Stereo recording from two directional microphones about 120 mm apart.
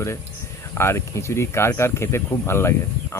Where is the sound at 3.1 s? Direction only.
20° left (ahead or behind).